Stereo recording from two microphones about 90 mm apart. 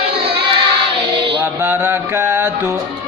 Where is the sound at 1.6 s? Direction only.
25° right (ahead or behind).